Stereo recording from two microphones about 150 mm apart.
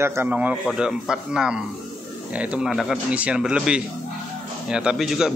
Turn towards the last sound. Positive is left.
turn(degrees=-5)  # may be behind; listen again after turning